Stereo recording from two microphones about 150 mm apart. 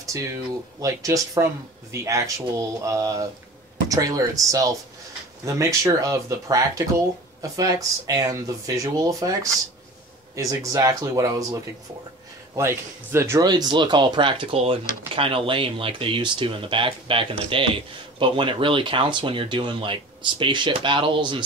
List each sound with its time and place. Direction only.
0.7 s speech: 20° right (ahead or behind)